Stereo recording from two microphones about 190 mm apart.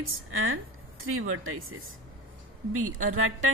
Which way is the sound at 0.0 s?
90° right.